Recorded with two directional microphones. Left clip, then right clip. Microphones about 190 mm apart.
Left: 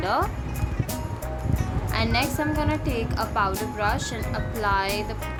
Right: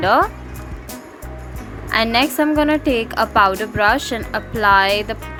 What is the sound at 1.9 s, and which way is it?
A woman's voice, 40° right (ahead or behind).